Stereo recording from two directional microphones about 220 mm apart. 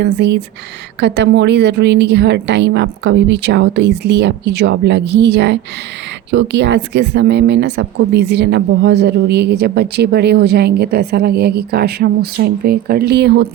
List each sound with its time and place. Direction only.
0.0 s speech: 50° right (ahead or behind)